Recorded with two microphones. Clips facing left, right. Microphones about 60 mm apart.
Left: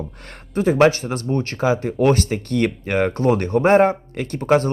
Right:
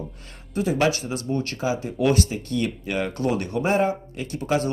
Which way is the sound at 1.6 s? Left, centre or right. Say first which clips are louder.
Left 8 dB; left.